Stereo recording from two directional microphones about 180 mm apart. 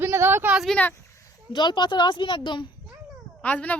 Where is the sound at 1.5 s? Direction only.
25° left (ahead or behind).